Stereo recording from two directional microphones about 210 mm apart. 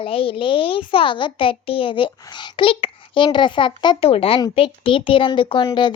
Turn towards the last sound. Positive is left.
turn(degrees=20)  # may be behind; listen again after turning